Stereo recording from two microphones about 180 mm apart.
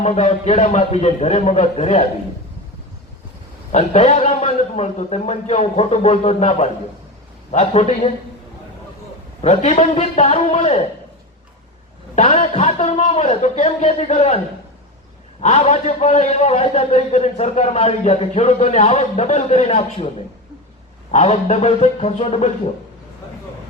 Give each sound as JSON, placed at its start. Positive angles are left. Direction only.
{"t": 0.0, "sound": "a man's voice", "side_deg": 35}
{"t": 3.7, "sound": "a man's voice", "side_deg": 40}
{"t": 9.4, "sound": "a man's voice", "side_deg": 40}
{"t": 12.1, "sound": "a man's voice", "side_deg": 40}
{"t": 15.4, "sound": "a man's voice", "side_deg": 35}
{"t": 21.1, "sound": "a man's voice", "side_deg": 35}